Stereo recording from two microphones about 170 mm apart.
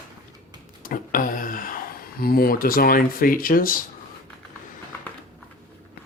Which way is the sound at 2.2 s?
60° left (ahead or behind).